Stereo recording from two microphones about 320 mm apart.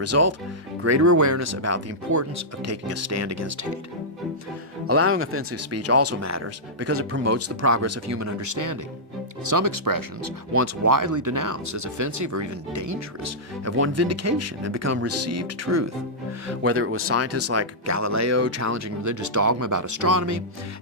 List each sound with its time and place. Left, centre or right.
0.0 s speech: right
4.9 s speech: right
10.6 s speech: right